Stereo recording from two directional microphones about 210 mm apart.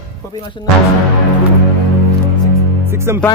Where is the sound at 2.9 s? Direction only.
10° right (ahead or behind).